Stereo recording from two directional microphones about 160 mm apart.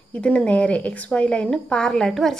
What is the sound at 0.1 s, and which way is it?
A woman's voice, 10° left (ahead or behind).